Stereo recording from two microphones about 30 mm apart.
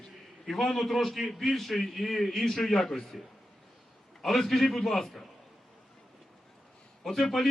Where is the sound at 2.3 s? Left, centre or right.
Centre.